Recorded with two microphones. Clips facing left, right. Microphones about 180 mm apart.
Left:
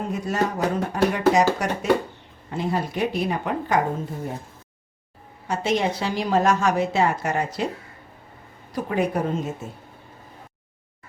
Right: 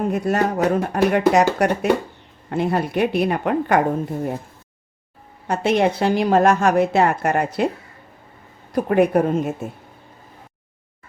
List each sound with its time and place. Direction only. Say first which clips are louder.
0.1 s a woman's voice: right 5 dB; 60° right (ahead or behind)
5.5 s a woman's voice: right 5 dB; 60° right (ahead or behind)
8.7 s a woman's voice: right 7 dB; 60° right (ahead or behind)